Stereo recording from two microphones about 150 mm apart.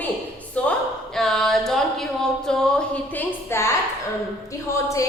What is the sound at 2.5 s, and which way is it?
A woman's voice, 5° left (ahead or behind).